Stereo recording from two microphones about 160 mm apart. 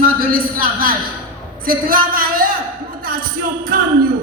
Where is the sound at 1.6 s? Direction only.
65° right (ahead or behind).